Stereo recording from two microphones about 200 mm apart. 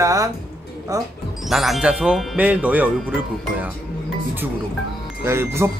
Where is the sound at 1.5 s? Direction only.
Centre (ahead or behind).